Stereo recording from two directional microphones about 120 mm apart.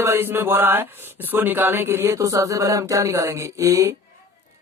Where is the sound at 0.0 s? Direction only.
20° right (ahead or behind).